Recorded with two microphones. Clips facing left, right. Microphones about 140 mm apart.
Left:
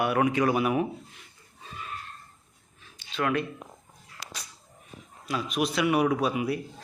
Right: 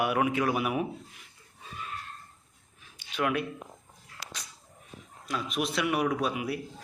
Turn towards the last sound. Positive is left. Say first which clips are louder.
# left 3 dB
turn(degrees=0)  # may be behind; listen again after turning